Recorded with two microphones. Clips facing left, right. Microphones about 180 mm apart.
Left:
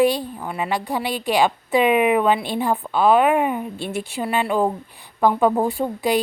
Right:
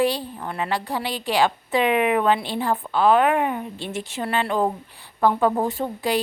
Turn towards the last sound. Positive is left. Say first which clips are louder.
# left 3 dB
turn(degrees=15)  # may be behind; listen again after turning